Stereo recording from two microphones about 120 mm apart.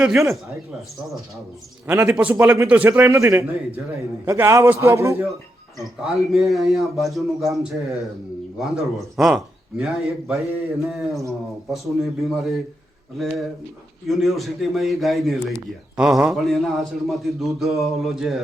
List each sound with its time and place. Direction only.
0.0 s a man's voice: 5° right (ahead or behind)
1.9 s a man's voice: 25° right (ahead or behind)
3.1 s a man's voice: 25° right (ahead or behind)
6.0 s a man's voice: centre (ahead or behind)